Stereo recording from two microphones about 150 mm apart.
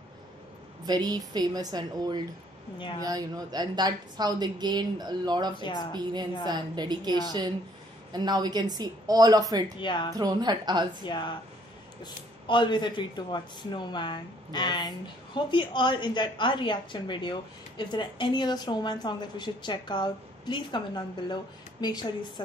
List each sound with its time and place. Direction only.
0.8 s a woman's voice: 25° right (ahead or behind)
5.6 s a woman's voice: 30° left (ahead or behind)
6.4 s a woman's voice: 30° right (ahead or behind)
9.8 s a woman's voice: 30° left (ahead or behind)
10.1 s a woman's voice: 25° right (ahead or behind)
11.1 s a woman's voice: 30° left (ahead or behind)